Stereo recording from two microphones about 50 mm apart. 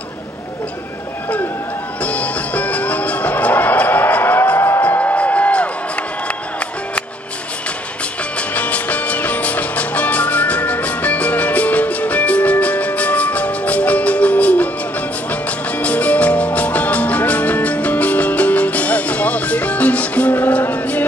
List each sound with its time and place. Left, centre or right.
2.0 s music: left
4.6 s music: left
4.8 s music: left
8.4 s music: left
15.8 s music: left